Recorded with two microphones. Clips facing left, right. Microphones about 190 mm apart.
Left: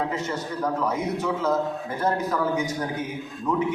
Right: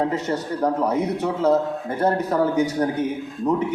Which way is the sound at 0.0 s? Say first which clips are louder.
Right 5 dB; 35° right (ahead or behind).